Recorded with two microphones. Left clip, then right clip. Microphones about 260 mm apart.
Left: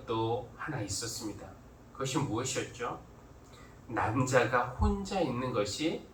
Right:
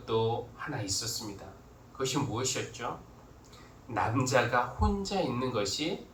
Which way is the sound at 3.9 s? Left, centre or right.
Right.